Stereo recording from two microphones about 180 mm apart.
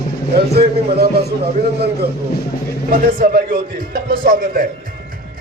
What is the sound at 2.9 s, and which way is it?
Speech, 55° right (ahead or behind).